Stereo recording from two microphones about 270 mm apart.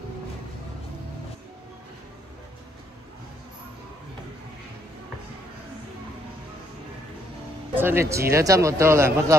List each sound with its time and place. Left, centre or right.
7.7 s a man's voice: centre